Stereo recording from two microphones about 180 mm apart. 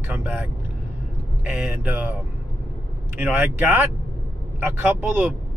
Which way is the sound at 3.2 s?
10° right (ahead or behind).